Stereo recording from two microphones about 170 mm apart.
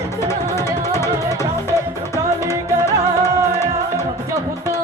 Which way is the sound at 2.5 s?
15° left (ahead or behind).